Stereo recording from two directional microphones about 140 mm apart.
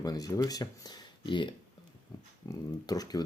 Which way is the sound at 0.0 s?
25° left (ahead or behind).